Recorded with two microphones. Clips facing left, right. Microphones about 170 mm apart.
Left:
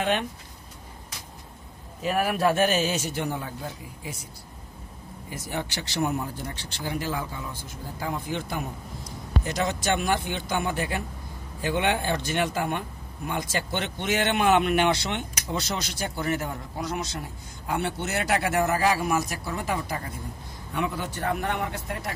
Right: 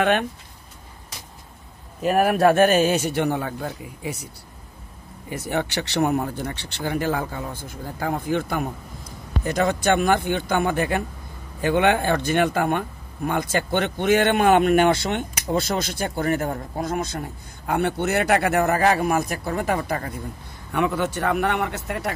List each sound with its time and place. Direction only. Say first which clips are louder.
0.0 s speech: right 6 dB; 55° right (ahead or behind)
2.0 s speech: right 6 dB; 50° right (ahead or behind); by 4.3 s 70° right (ahead or behind)
5.3 s a man's voice: right 7 dB; 65° right (ahead or behind)